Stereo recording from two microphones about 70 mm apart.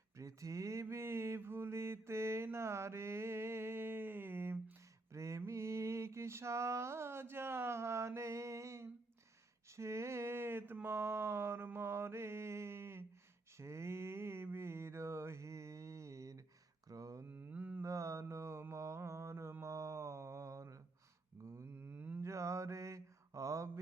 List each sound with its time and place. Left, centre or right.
0.2 s mantra: right
5.1 s mantra: right
5.5 s a sound: right
10.8 s mantra: right
16.9 s a sound: right
17.2 s mantra: right
17.8 s mantra: right
21.6 s a sound: right
22.2 s mantra: right